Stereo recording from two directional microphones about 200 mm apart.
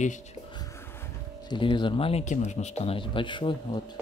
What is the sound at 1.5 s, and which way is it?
Speech, 25° left (ahead or behind).